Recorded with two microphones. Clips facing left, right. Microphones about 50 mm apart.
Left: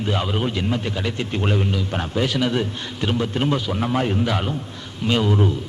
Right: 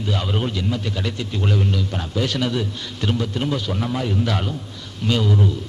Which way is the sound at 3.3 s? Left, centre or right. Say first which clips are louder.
Left 2 dB; left.